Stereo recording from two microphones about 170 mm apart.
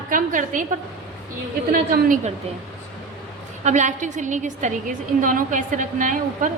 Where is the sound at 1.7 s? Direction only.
55° right (ahead or behind).